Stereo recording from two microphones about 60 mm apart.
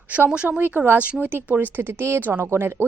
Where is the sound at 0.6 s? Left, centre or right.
Right.